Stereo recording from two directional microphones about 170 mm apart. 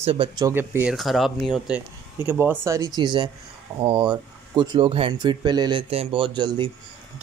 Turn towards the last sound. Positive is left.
turn(degrees=-25)  # may be behind; listen again after turning